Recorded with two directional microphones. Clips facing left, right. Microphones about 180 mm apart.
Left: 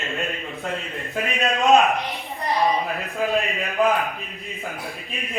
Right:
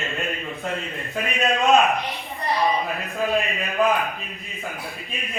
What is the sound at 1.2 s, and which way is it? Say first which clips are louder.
A man's voice: even; centre (ahead or behind).